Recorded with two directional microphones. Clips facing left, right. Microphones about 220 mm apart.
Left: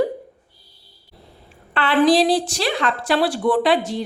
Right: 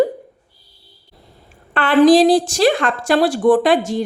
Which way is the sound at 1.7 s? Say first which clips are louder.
Right 5 dB; 45° right (ahead or behind).